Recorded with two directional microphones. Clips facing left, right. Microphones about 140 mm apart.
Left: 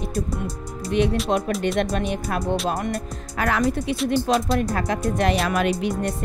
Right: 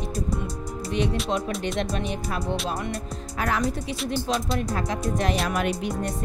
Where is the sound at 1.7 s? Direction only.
60° left (ahead or behind).